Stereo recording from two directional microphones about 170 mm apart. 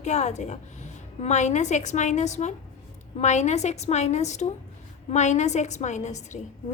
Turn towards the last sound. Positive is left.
turn(degrees=45)  # may be behind; listen again after turning